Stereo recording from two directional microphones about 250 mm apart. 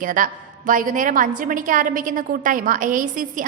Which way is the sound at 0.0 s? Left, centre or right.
Right.